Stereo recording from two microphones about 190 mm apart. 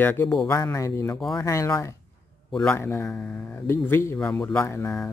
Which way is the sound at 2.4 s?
5° left (ahead or behind).